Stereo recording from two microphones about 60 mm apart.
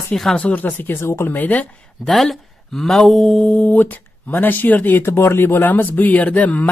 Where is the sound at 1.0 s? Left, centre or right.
Left.